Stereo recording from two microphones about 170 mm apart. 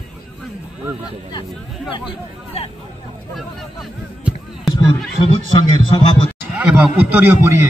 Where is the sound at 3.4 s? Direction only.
Centre (ahead or behind).